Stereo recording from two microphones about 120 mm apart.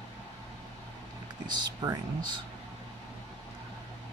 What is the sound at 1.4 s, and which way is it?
Speech, 35° right (ahead or behind).